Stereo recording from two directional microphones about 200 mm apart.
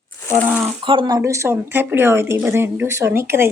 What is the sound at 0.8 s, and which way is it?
Speech, 25° right (ahead or behind).